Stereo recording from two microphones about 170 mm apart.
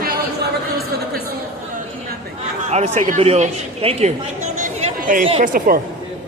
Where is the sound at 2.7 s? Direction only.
40° right (ahead or behind).